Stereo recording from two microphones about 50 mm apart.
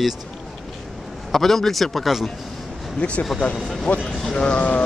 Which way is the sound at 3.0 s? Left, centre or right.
Left.